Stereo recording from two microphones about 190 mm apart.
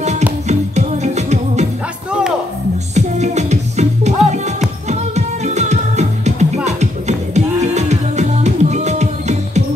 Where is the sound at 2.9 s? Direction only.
35° right (ahead or behind).